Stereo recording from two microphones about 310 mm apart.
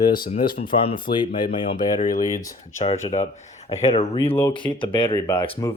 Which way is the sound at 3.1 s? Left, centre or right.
Left.